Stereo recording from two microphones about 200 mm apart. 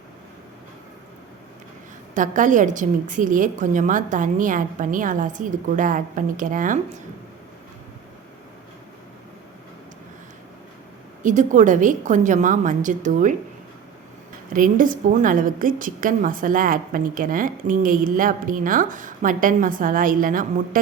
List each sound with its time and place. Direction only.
2.1 s a woman's voice: 40° right (ahead or behind)
11.2 s a woman's voice: 40° right (ahead or behind)
14.5 s a woman's voice: 45° right (ahead or behind)